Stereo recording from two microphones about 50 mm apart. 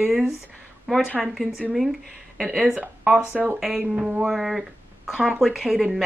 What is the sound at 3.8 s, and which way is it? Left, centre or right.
Speech, centre.